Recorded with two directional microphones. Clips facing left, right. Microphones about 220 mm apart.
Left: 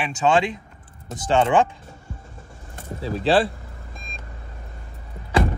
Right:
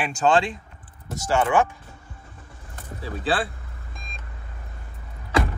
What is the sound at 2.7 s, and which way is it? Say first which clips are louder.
Vehicle: left 5 dB; 25° left (ahead or behind).